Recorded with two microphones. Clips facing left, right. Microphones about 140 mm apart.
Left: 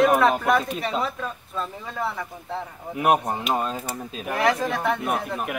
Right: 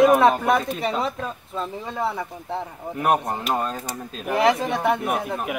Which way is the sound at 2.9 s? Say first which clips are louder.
Left 1 dB; 10° left (ahead or behind).